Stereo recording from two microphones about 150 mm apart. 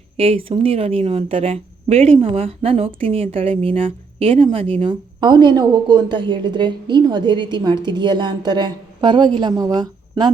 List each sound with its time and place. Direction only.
0.2 s a woman's voice: 40° right (ahead or behind)